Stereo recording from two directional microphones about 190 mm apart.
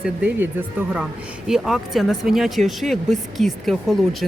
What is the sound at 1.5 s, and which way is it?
Speech, centre (ahead or behind).